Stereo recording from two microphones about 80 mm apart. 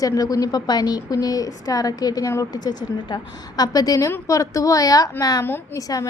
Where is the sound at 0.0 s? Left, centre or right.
Left.